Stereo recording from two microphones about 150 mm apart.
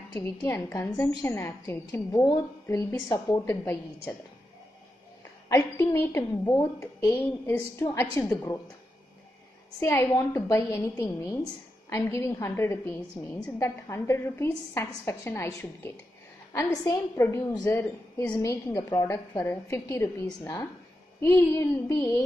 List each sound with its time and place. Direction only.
0.1 s a woman's voice: 15° left (ahead or behind)
5.5 s a woman's voice: 15° left (ahead or behind)
9.8 s a woman's voice: 20° left (ahead or behind)